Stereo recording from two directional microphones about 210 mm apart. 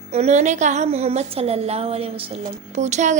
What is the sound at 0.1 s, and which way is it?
A woman's voice, 30° right (ahead or behind).